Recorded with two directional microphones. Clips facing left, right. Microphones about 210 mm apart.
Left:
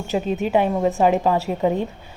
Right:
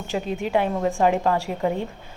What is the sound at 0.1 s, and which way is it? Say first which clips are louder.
A woman's voice: left 3 dB; 20° left (ahead or behind).